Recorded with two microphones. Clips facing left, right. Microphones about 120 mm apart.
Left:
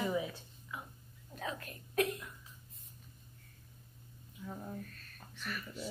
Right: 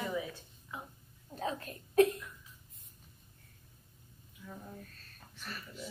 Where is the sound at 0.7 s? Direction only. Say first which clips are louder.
Right 1 dB; 30° right (ahead or behind).